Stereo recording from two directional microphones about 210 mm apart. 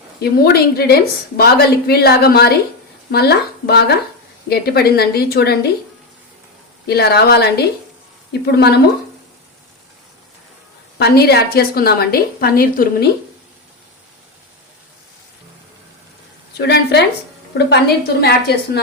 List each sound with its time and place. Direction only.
0.2 s a woman's voice: 50° left (ahead or behind)
6.8 s a woman's voice: 50° left (ahead or behind)
10.9 s a woman's voice: 50° left (ahead or behind)
16.6 s a woman's voice: 50° left (ahead or behind)